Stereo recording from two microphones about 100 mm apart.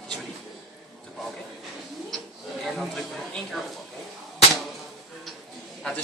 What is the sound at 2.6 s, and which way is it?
Speech, 5° left (ahead or behind).